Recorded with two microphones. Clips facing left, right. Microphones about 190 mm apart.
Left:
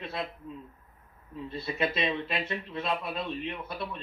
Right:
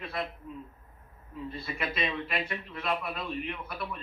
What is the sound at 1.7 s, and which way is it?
A man's voice, 30° left (ahead or behind).